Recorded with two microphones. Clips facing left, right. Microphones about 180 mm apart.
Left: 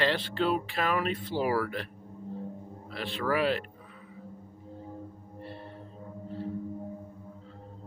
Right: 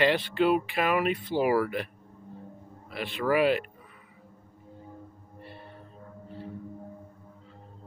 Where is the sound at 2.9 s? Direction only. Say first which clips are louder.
Right 3 dB; 10° right (ahead or behind).